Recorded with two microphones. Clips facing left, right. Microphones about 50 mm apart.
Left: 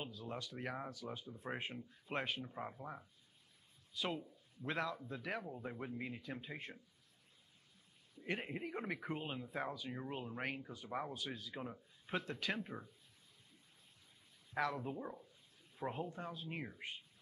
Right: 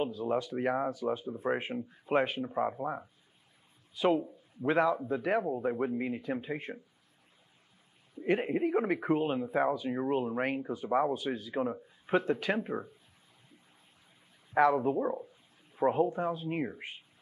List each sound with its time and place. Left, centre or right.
0.0 s speech: right
2.4 s speech: right
3.9 s speech: right
8.1 s speech: right
11.1 s speech: right
14.5 s speech: right
15.0 s speech: right
15.2 s speech: right